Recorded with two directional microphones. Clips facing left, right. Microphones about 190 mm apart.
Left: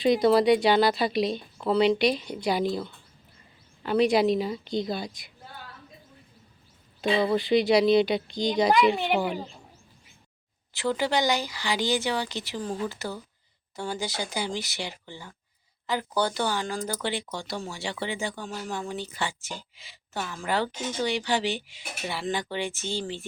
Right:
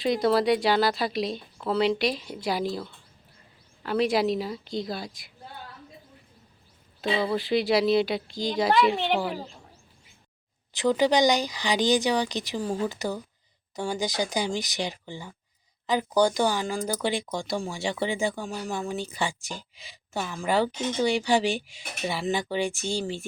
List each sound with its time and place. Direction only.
0.0 s speech: centre (ahead or behind)
7.2 s speech: centre (ahead or behind)
10.8 s speech: 15° right (ahead or behind)